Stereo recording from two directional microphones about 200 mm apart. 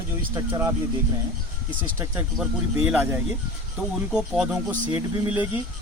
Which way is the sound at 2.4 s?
5° right (ahead or behind).